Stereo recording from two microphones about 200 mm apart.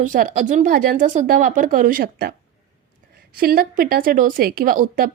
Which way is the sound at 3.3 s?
45° right (ahead or behind).